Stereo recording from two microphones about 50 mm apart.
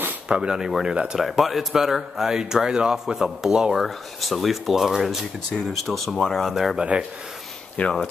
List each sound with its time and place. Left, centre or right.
0.3 s speech: centre
0.8 s speech: centre
1.2 s speech: centre
3.7 s speech: centre
6.8 s speech: centre
7.8 s speech: left